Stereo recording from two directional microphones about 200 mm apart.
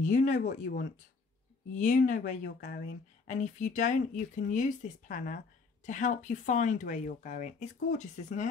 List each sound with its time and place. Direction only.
0.0 s speech: 40° left (ahead or behind)
1.8 s speech: 40° left (ahead or behind)